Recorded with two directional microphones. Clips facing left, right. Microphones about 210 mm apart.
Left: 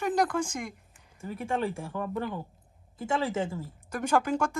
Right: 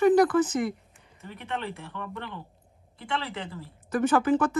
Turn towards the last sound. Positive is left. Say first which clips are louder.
# right 4 dB
turn(degrees=10)  # may be behind; listen again after turning